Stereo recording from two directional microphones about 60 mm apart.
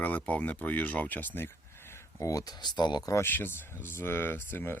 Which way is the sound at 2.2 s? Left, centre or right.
Left.